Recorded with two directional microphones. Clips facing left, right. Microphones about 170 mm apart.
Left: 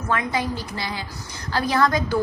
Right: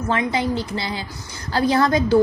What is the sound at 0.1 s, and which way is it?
A woman's voice, 25° right (ahead or behind).